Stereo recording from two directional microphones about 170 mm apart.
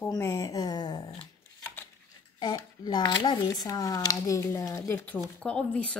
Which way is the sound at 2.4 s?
25° left (ahead or behind).